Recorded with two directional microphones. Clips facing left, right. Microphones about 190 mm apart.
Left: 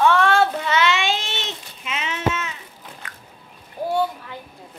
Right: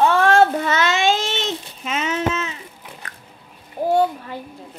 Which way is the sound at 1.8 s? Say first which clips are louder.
Right 3 dB; 40° right (ahead or behind).